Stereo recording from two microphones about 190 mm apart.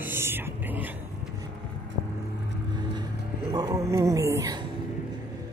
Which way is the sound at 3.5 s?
15° right (ahead or behind).